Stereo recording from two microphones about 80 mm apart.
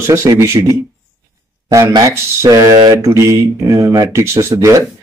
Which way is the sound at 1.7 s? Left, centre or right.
Right.